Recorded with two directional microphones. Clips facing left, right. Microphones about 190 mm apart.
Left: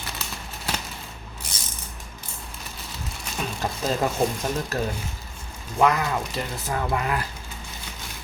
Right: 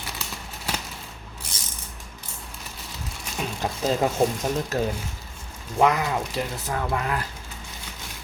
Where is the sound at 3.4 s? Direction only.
15° right (ahead or behind).